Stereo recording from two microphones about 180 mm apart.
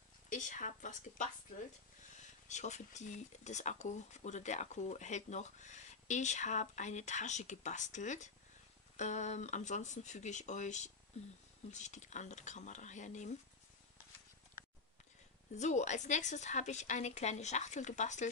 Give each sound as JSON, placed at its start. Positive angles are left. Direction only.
{"t": 0.3, "sound": "speech", "side_deg": 45}
{"t": 2.4, "sound": "speech", "side_deg": 40}
{"t": 15.5, "sound": "speech", "side_deg": 40}